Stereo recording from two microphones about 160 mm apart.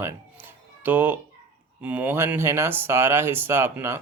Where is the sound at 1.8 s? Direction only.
10° right (ahead or behind).